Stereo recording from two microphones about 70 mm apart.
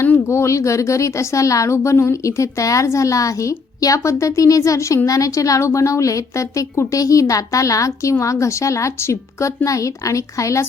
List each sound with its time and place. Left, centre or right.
0.3 s speech: left